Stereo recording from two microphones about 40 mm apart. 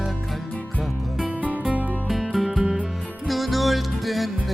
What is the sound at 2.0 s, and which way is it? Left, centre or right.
Music, centre.